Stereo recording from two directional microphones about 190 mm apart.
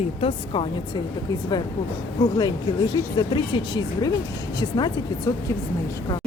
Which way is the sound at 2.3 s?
20° left (ahead or behind).